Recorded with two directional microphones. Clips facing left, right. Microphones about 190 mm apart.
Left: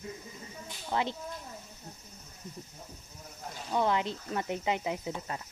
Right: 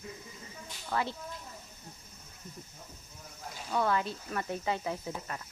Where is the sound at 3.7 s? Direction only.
20° left (ahead or behind).